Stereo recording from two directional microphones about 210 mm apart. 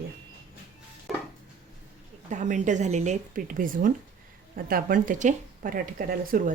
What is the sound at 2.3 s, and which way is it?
Speech, 35° right (ahead or behind).